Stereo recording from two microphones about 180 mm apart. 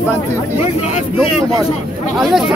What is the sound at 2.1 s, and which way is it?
Speech, centre (ahead or behind).